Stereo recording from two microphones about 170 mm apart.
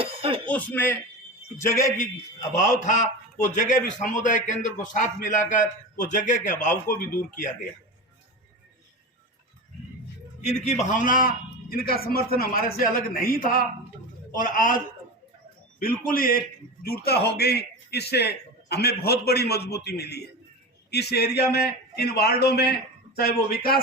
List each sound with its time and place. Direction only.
0.0 s a sound: 35° right (ahead or behind)
0.4 s speech: 10° left (ahead or behind)
2.6 s a man's voice: 45° left (ahead or behind)
10.4 s a man's voice: 40° left (ahead or behind)
16.0 s a man's voice: 60° left (ahead or behind)